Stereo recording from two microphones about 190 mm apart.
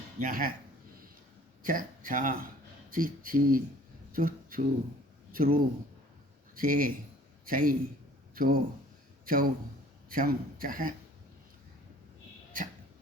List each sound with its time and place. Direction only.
0.2 s speech: 45° right (ahead or behind)
1.6 s speech: 45° right (ahead or behind)
6.6 s a man's voice: 45° right (ahead or behind)